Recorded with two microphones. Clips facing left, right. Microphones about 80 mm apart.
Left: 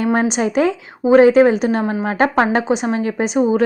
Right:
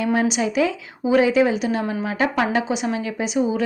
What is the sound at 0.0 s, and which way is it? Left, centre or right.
Speech, left.